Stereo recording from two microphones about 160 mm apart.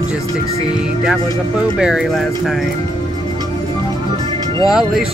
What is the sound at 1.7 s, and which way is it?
Speech, 5° right (ahead or behind).